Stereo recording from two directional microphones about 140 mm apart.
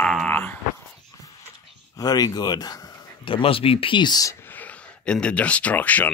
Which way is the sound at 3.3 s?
40° left (ahead or behind).